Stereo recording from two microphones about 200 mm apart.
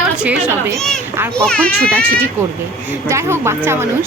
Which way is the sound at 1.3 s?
5° left (ahead or behind).